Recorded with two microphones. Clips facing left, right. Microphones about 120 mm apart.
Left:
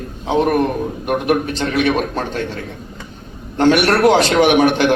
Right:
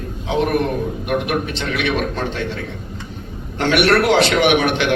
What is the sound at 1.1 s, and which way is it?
A man's voice, 40° left (ahead or behind).